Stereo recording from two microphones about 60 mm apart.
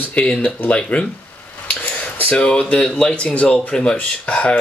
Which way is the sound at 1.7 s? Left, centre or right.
Left.